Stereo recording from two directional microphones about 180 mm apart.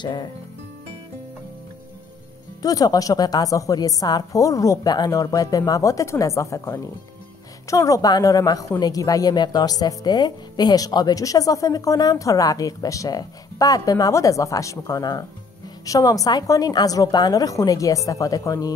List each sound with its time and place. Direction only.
0.0 s a woman's voice: 25° left (ahead or behind)
2.6 s a woman's voice: 20° left (ahead or behind)